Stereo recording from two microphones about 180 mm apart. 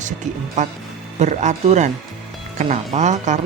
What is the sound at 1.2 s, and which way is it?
Speech, 40° right (ahead or behind).